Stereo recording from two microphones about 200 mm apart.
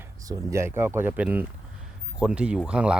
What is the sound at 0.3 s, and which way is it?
Speech, 15° right (ahead or behind).